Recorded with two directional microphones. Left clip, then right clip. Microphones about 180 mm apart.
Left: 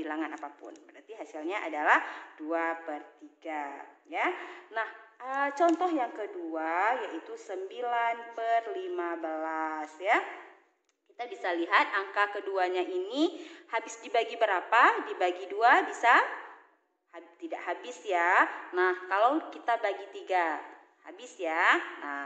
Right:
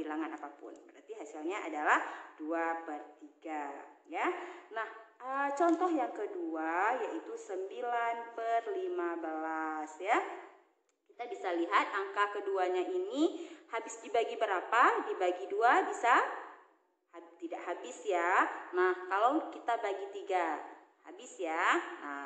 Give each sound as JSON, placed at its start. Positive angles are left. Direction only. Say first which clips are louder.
{"t": 0.0, "sound": "a sound", "louder": "left 3 dB", "side_deg": 45}
{"t": 1.1, "sound": "speech", "louder": "left 4 dB", "side_deg": 40}
{"t": 4.1, "sound": "a woman's voice", "louder": "left 4 dB", "side_deg": 40}